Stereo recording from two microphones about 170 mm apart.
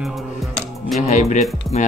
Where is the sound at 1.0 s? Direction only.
45° left (ahead or behind).